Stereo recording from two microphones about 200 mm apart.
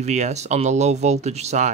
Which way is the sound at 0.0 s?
35° right (ahead or behind).